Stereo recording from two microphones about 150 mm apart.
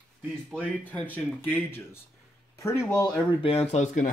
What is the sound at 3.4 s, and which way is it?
Speech, 40° left (ahead or behind).